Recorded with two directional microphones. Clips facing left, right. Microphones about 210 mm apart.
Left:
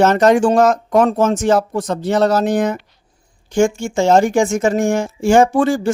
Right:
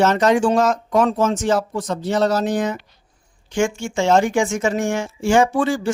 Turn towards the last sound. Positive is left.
turn(degrees=50)  # may be behind; listen again after turning